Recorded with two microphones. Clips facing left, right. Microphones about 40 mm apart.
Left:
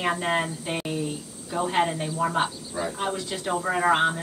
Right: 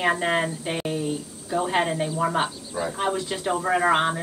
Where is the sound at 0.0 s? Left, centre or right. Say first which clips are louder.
Right 3 dB; centre.